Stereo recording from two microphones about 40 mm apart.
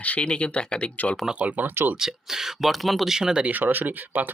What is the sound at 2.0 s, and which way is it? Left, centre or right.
Speech, centre.